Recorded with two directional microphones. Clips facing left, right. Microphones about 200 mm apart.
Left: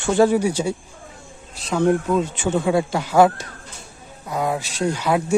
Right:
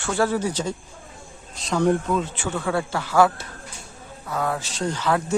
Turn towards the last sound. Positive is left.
turn(degrees=10)  # may be behind; listen again after turning